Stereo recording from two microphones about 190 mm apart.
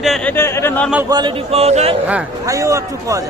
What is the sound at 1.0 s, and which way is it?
Speech, 25° right (ahead or behind).